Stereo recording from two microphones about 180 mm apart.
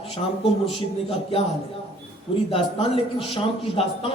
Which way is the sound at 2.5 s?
30° left (ahead or behind).